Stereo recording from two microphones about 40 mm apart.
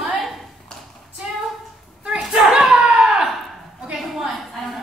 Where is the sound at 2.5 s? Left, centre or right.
Centre.